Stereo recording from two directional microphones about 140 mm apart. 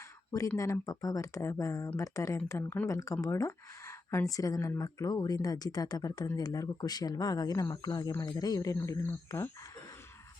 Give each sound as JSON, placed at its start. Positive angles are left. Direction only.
{"t": 0.3, "sound": "speech", "side_deg": 25}